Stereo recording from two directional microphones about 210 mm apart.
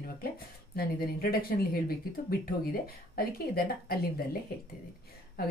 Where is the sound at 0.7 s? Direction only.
45° left (ahead or behind).